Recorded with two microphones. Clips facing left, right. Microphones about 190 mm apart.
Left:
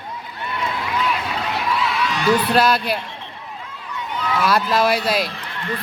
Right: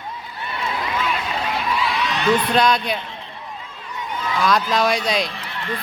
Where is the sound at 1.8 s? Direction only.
10° left (ahead or behind).